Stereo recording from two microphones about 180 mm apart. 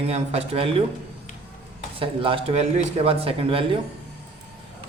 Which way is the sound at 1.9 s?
30° right (ahead or behind).